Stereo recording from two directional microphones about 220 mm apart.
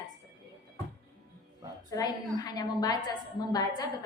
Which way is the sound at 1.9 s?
15° left (ahead or behind).